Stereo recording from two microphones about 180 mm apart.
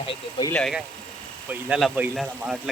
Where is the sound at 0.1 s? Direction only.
25° left (ahead or behind).